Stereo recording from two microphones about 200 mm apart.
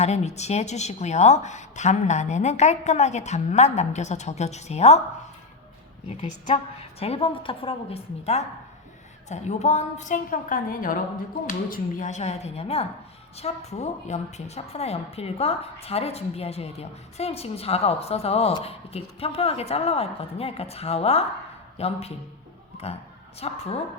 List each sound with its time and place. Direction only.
0.0 s a woman's voice: 35° left (ahead or behind)
7.0 s a woman's voice: 30° left (ahead or behind)